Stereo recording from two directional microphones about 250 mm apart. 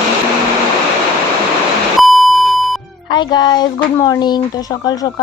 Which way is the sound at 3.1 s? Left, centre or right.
Centre.